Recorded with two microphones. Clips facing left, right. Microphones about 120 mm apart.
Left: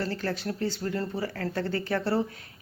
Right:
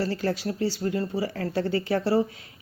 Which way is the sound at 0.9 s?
10° right (ahead or behind).